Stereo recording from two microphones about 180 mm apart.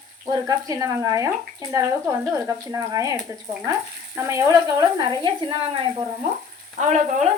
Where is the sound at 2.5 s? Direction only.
20° right (ahead or behind).